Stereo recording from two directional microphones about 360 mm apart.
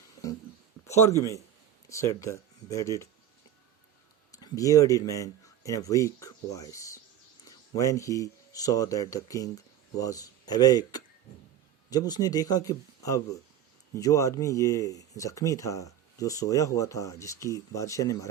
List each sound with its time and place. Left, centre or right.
0.9 s speech: centre
4.3 s a man's voice: centre